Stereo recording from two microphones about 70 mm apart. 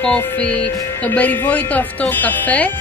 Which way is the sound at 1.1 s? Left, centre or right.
Left.